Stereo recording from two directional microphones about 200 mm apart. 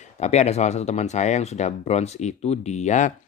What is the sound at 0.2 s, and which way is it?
Speech, 35° left (ahead or behind).